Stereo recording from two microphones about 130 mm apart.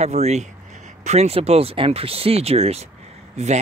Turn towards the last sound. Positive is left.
turn(degrees=-60)  # may be behind; listen again after turning